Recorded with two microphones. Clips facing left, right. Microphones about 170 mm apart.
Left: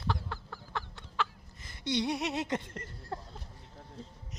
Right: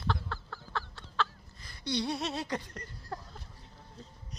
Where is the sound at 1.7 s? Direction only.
20° left (ahead or behind).